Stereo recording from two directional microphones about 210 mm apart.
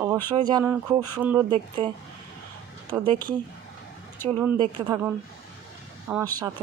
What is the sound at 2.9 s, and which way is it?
Speech, 20° right (ahead or behind).